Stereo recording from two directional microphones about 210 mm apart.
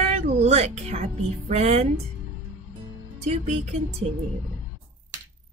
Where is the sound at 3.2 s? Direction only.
30° right (ahead or behind).